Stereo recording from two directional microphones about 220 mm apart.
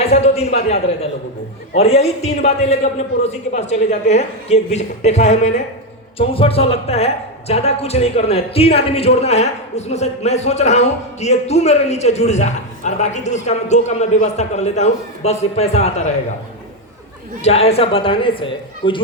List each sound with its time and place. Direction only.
0.1 s a woman's voice: 30° left (ahead or behind)
17.4 s a woman's voice: 30° left (ahead or behind)